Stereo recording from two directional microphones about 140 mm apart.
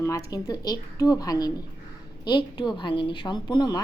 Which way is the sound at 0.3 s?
25° left (ahead or behind).